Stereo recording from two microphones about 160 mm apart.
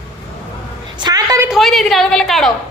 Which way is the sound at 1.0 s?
25° right (ahead or behind).